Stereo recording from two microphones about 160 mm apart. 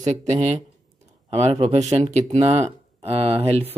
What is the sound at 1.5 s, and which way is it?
Speech, 35° right (ahead or behind).